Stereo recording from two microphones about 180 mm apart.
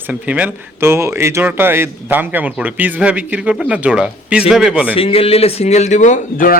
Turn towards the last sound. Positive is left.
turn(degrees=45)  # may be behind; listen again after turning